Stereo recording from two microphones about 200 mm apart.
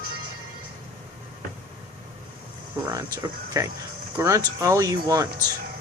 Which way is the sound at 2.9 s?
15° right (ahead or behind).